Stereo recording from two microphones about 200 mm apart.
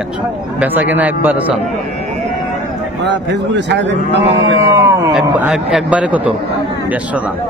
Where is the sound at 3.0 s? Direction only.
60° right (ahead or behind).